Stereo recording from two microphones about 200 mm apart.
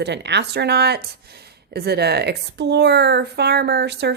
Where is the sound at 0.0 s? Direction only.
60° right (ahead or behind).